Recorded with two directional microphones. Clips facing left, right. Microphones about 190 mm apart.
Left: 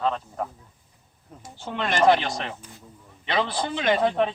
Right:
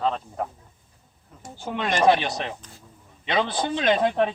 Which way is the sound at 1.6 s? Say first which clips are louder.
Even; 15° right (ahead or behind).